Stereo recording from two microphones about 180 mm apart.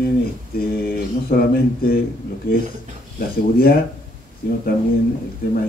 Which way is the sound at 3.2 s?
55° left (ahead or behind).